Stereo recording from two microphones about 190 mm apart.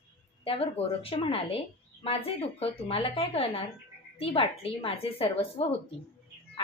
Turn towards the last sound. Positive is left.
turn(degrees=25)  # may be behind; listen again after turning